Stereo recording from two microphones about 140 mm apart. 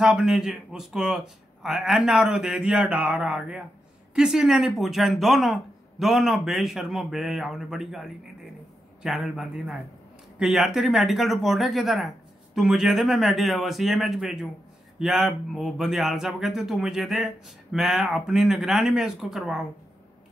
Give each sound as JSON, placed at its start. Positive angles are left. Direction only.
{"t": 0.0, "sound": "speech", "side_deg": -5}